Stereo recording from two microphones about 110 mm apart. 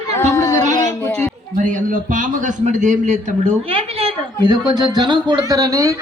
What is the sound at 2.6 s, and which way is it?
Speech, 90° right.